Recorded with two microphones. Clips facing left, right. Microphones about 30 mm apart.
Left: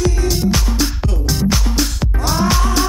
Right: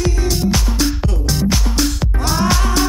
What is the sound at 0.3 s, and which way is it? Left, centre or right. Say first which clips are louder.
Music: even; centre.